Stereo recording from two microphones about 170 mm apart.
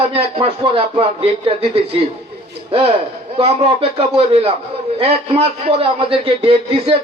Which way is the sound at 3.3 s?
35° right (ahead or behind).